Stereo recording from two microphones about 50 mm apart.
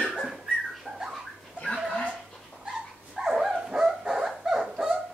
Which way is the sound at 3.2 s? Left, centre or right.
Centre.